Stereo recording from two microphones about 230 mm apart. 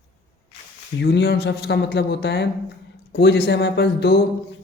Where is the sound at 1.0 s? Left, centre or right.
Left.